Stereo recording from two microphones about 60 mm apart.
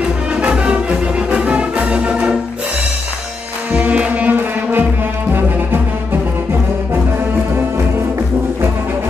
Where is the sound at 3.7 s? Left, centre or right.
Right.